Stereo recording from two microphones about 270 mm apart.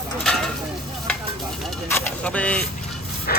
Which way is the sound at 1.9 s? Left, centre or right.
Centre.